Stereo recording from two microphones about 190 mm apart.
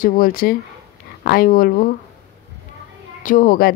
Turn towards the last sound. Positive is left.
turn(degrees=50)  # may be behind; listen again after turning